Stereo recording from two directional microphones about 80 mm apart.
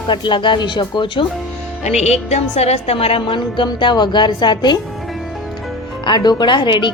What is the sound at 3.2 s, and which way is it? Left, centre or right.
A woman's voice, left.